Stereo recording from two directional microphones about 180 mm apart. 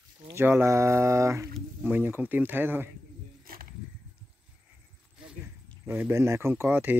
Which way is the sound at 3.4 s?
55° right (ahead or behind).